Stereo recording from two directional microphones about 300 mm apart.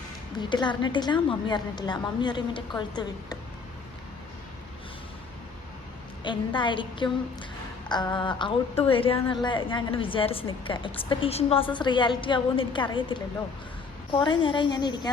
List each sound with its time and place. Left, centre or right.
0.3 s a woman's voice: centre
6.2 s a woman's voice: centre